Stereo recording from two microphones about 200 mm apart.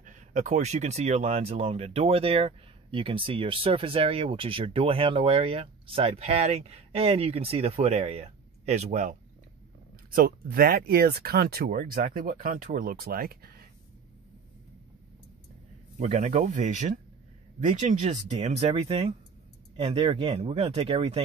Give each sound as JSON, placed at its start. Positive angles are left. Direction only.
{"t": 0.0, "sound": "speech", "side_deg": -40}
{"t": 10.1, "sound": "speech", "side_deg": -50}
{"t": 16.0, "sound": "speech", "side_deg": -35}